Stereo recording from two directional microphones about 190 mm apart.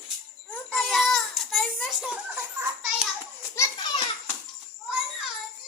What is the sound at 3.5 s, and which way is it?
Children playing, 15° left (ahead or behind).